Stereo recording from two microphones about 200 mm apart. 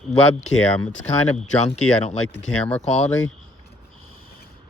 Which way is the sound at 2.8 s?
35° left (ahead or behind).